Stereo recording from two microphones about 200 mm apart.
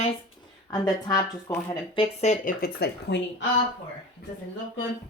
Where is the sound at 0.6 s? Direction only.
20° left (ahead or behind); by 3.5 s 55° left (ahead or behind).